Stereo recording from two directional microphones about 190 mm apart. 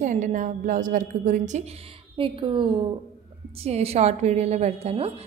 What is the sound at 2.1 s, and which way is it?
A woman's voice, 25° right (ahead or behind).